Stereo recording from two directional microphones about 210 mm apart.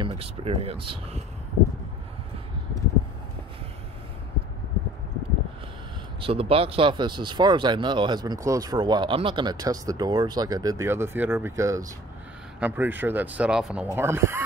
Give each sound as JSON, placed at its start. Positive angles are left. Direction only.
{"t": 0.0, "sound": "speech", "side_deg": -25}
{"t": 6.2, "sound": "speech", "side_deg": -25}